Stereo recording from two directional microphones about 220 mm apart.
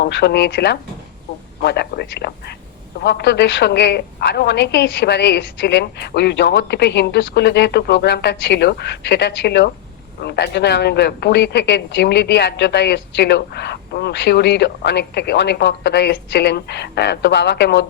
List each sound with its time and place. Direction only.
0.0 s speech: 50° left (ahead or behind)